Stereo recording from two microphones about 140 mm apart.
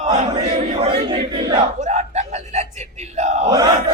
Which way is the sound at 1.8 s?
55° right (ahead or behind).